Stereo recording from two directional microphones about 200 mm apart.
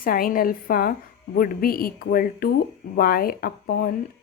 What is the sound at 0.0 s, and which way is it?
Speech, 45° left (ahead or behind).